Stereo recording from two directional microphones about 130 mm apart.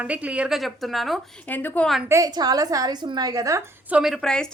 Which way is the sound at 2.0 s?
25° right (ahead or behind).